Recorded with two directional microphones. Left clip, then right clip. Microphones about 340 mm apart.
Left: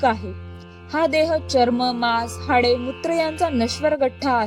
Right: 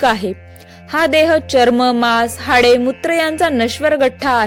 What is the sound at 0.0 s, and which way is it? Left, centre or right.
Speech, right.